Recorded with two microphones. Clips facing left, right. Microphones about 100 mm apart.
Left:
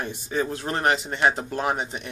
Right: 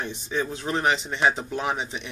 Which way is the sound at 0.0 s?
5° left (ahead or behind).